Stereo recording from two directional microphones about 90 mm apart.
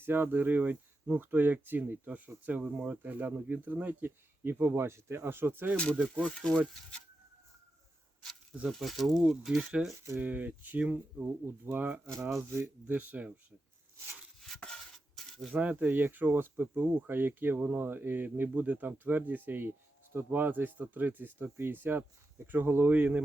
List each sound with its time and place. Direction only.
0.0 s speech: 25° right (ahead or behind)
5.7 s speech: 15° left (ahead or behind)
6.0 s speech: 10° right (ahead or behind)
8.6 s speech: centre (ahead or behind)
10.2 s speech: 20° right (ahead or behind)
14.6 s a sound: 5° left (ahead or behind)
15.5 s speech: 15° right (ahead or behind)